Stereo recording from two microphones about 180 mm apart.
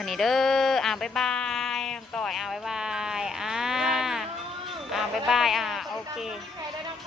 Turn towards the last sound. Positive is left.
turn(degrees=0)  # may be behind; listen again after turning